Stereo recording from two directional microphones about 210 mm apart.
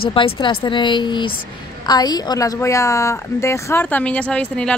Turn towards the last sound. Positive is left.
turn(degrees=5)  # may be behind; listen again after turning